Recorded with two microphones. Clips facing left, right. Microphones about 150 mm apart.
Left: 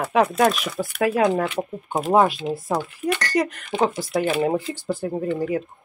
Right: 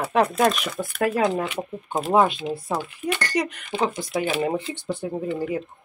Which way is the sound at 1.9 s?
5° left (ahead or behind).